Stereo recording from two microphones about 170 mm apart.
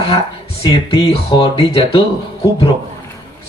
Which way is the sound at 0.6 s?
35° left (ahead or behind).